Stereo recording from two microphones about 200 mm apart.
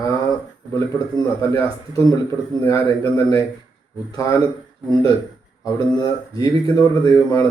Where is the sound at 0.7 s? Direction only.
15° left (ahead or behind).